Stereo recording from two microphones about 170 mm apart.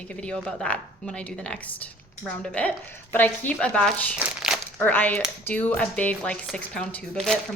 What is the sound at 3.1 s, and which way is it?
A woman's voice, 10° left (ahead or behind).